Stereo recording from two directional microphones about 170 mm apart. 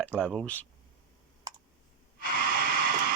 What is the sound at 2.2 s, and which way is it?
Snort, 60° right (ahead or behind).